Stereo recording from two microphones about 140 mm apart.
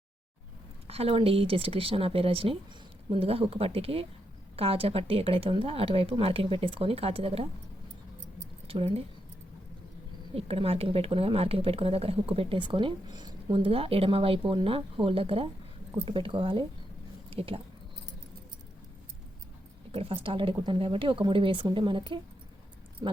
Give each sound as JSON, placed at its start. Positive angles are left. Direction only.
{"t": 0.9, "sound": "speech", "side_deg": -45}
{"t": 8.6, "sound": "speech", "side_deg": -45}
{"t": 10.3, "sound": "speech", "side_deg": -45}
{"t": 17.2, "sound": "a sound", "side_deg": -40}
{"t": 19.9, "sound": "speech", "side_deg": -40}